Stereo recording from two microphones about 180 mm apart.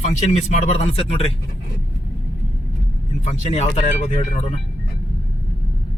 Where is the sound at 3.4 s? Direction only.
40° left (ahead or behind).